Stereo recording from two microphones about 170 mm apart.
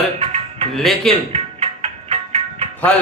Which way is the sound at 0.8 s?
Centre (ahead or behind).